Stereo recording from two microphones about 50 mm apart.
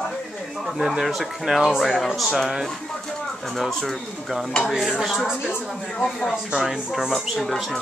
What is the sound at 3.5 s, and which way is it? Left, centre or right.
Speech, centre.